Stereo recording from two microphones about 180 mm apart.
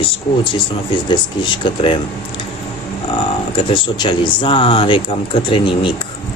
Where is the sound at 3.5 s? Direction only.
25° left (ahead or behind).